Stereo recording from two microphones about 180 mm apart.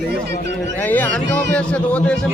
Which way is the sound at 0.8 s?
10° left (ahead or behind).